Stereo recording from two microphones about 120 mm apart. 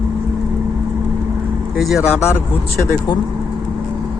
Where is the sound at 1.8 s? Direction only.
Centre (ahead or behind).